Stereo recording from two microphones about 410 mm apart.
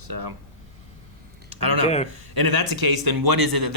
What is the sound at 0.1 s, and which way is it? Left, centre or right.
Speech, right.